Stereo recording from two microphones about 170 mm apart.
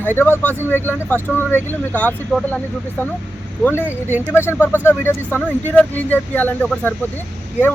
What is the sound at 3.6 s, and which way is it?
Speech, 15° left (ahead or behind).